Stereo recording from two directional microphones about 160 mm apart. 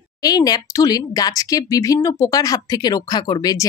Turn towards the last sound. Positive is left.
turn(degrees=20)  # may be behind; listen again after turning